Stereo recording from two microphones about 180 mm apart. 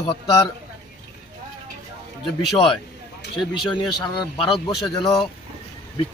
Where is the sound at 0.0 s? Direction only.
20° left (ahead or behind).